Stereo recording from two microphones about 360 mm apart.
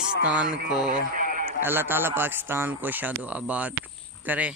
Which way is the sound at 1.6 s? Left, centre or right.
Centre.